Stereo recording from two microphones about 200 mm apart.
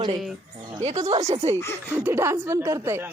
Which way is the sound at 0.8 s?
35° right (ahead or behind).